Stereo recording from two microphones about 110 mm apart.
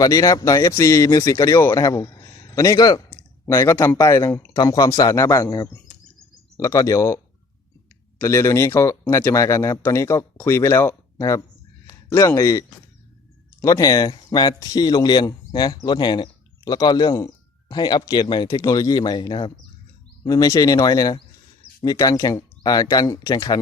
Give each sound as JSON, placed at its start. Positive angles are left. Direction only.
{"t": 0.0, "sound": "a man's voice", "side_deg": 35}
{"t": 3.8, "sound": "speech", "side_deg": 25}
{"t": 4.5, "sound": "speech", "side_deg": 35}
{"t": 8.2, "sound": "speech", "side_deg": 25}
{"t": 11.2, "sound": "speech", "side_deg": 30}